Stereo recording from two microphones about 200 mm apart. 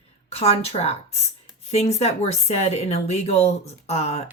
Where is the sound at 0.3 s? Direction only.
30° left (ahead or behind).